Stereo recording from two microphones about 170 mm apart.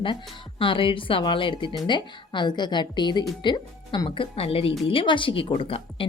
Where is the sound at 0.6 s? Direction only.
30° left (ahead or behind).